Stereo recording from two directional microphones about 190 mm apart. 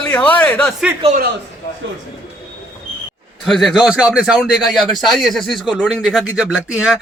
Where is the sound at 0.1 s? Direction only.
10° left (ahead or behind).